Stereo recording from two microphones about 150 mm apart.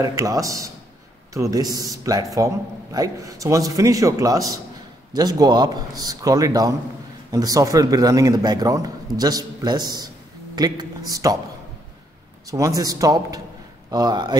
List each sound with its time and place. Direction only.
0.0 s a man's voice: 20° right (ahead or behind)
12.4 s a man's voice: 20° right (ahead or behind)